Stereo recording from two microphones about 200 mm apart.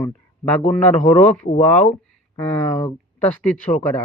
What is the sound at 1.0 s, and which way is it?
Mantra, 35° left (ahead or behind).